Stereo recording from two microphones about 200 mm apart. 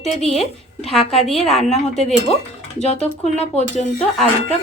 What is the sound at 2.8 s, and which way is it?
Speech, 35° left (ahead or behind).